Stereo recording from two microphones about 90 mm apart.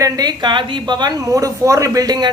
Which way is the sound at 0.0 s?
50° right (ahead or behind).